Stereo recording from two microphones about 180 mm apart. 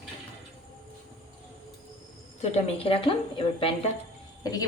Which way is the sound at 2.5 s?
30° left (ahead or behind).